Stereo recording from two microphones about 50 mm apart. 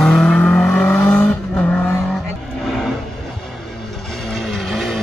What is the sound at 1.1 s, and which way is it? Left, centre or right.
Vehicle, left.